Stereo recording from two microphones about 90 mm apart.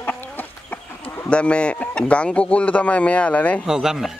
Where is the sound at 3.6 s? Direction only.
5° right (ahead or behind).